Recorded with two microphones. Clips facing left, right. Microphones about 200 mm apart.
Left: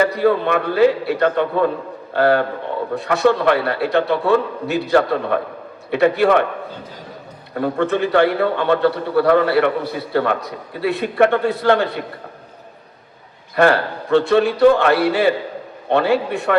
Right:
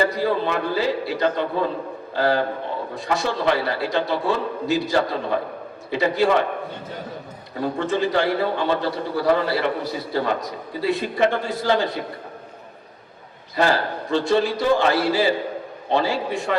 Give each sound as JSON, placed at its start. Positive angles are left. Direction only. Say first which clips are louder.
{"t": 0.0, "sound": "a man's voice", "louder": "left 5 dB", "side_deg": 60}
{"t": 7.5, "sound": "a man's voice", "louder": "left 4 dB", "side_deg": 60}
{"t": 13.6, "sound": "a man's voice", "louder": "left 5 dB", "side_deg": 60}